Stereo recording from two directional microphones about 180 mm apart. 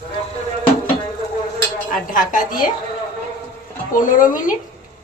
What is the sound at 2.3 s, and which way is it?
Speech, 50° left (ahead or behind).